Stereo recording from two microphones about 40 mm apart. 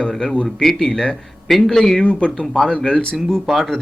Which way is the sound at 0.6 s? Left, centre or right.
Centre.